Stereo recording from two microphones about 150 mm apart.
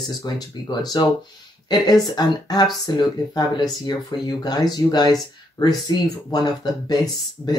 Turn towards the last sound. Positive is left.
turn(degrees=25)  # may be behind; listen again after turning